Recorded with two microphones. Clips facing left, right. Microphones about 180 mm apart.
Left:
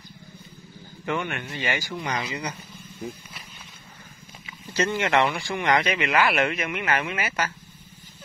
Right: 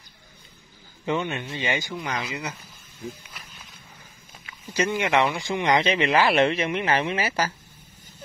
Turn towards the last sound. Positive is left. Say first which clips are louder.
# right 3 dB
turn(degrees=-30)  # may be behind; listen again after turning